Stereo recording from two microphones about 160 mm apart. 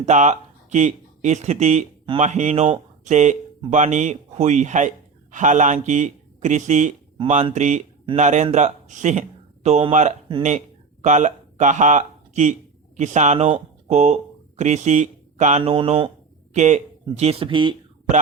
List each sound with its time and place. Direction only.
0.0 s speech: 50° right (ahead or behind)
15.7 s speech: 30° right (ahead or behind)
16.6 s speech: 45° right (ahead or behind)